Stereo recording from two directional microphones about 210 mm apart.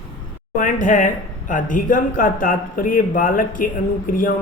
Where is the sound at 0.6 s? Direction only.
40° left (ahead or behind).